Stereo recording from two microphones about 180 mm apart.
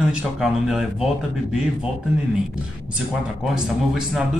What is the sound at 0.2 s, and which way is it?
A man's voice, 5° right (ahead or behind).